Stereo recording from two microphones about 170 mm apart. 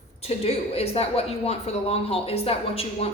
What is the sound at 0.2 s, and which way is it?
A man's voice, 35° left (ahead or behind).